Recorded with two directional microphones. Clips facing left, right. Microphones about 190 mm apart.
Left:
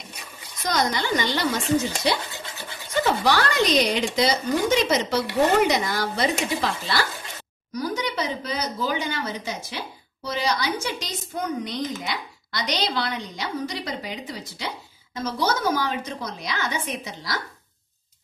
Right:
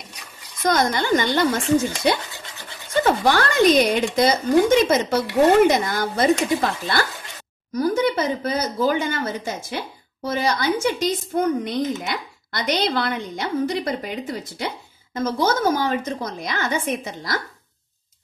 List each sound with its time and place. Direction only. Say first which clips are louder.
0.6 s speech: right 4 dB; 50° right (ahead or behind)